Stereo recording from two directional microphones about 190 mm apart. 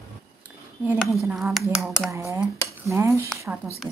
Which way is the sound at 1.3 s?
Centre (ahead or behind).